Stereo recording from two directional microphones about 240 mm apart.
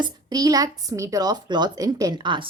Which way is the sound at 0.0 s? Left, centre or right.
Centre.